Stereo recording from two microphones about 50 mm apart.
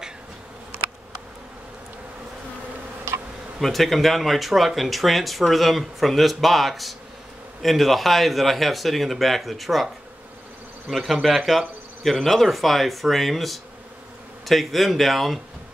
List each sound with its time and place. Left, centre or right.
0.7 s bee: right
3.6 s speech: centre
10.9 s speech: centre